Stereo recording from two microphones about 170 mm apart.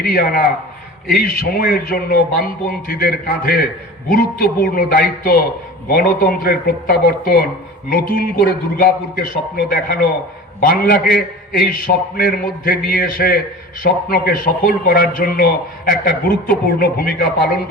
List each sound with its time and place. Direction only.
0.0 s a man's voice: 60° left (ahead or behind)